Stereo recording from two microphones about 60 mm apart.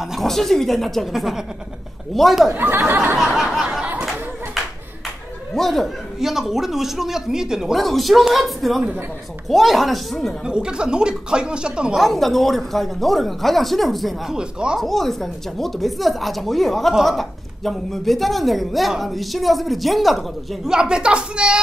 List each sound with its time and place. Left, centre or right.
0.0 s a woman's voice: centre
2.5 s speech: right
3.2 s a sound: centre
5.5 s a woman's voice: centre
7.7 s a woman's voice: centre
10.4 s speech: centre
12.0 s a woman's voice: centre
14.3 s speech: centre
14.8 s a woman's voice: centre
20.6 s speech: centre